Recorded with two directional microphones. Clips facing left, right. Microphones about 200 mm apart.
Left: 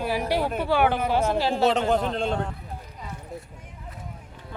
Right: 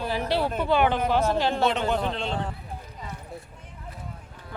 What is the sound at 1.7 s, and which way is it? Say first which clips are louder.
Speech: left 3 dB; 40° left (ahead or behind).